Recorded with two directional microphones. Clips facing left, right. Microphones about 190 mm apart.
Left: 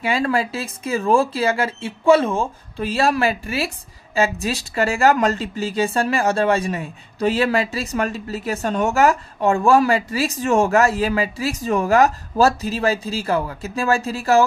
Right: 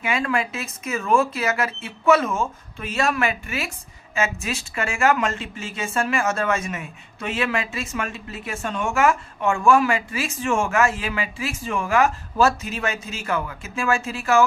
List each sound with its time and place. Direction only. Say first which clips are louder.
0.0 s speech: left 4 dB; 35° left (ahead or behind)